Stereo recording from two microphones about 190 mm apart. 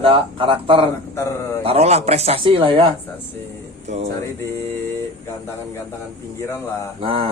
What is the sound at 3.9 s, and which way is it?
Speech, 35° right (ahead or behind).